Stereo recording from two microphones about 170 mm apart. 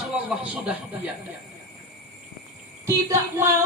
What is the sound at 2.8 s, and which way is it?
Speech, 15° right (ahead or behind).